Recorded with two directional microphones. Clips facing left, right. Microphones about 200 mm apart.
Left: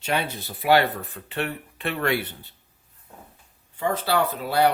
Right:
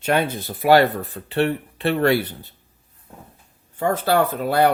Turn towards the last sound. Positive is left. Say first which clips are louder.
# right 4 dB
turn(degrees=-50)  # may be behind; listen again after turning